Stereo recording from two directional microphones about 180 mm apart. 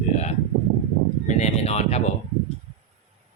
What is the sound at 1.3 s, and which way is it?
Speech, 40° left (ahead or behind).